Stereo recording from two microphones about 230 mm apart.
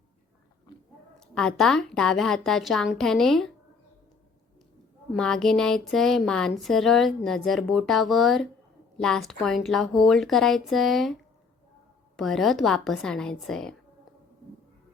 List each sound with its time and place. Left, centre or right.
1.4 s a woman's voice: centre
5.1 s a woman's voice: centre
12.1 s a woman's voice: centre